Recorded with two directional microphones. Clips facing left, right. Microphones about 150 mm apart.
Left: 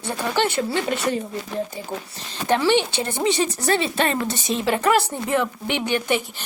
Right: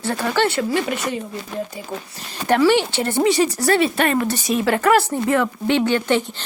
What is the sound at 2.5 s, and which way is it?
Speech, 20° left (ahead or behind).